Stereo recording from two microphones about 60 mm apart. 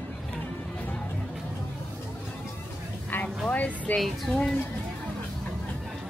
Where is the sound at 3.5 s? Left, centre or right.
Left.